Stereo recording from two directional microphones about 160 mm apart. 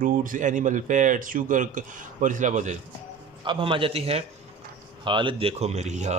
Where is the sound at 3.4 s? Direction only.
30° right (ahead or behind).